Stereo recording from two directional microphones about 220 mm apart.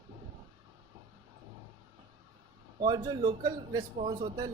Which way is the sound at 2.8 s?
20° right (ahead or behind).